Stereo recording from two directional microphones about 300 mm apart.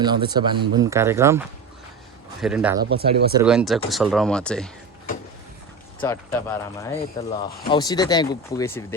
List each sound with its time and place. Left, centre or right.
0.0 s speech: centre
2.4 s speech: centre
2.9 s speech: centre
3.4 s speech: centre
6.0 s speech: centre